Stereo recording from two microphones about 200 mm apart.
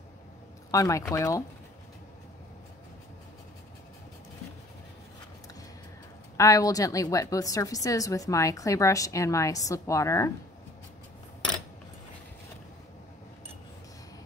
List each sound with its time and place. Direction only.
0.7 s a woman's voice: 15° left (ahead or behind)
6.3 s a woman's voice: 15° left (ahead or behind)